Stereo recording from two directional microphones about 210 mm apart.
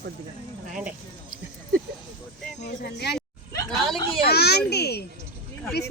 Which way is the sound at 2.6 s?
50° left (ahead or behind).